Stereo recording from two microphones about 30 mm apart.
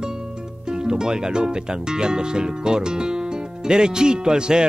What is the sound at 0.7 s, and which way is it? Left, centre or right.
Speech, right.